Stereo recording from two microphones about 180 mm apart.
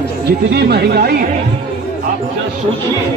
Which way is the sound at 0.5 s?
65° right (ahead or behind).